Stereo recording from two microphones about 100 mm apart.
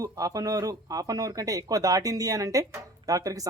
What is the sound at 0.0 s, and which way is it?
A man's voice, 35° right (ahead or behind).